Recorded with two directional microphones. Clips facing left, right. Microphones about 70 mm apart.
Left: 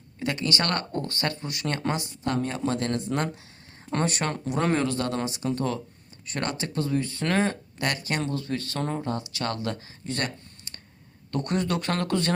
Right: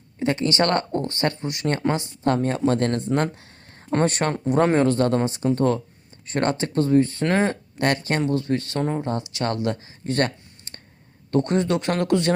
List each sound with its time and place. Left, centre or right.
0.2 s speech: right
7.8 s speech: right
8.8 s speech: centre
10.0 s speech: right
10.7 s a sound: right
11.3 s speech: right